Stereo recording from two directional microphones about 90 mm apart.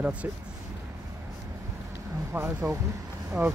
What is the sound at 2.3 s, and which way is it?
Speech, 20° right (ahead or behind).